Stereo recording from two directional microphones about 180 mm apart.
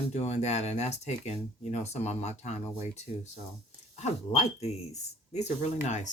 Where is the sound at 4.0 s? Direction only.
35° left (ahead or behind).